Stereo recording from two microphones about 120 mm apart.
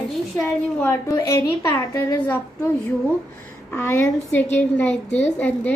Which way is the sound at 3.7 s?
20° left (ahead or behind).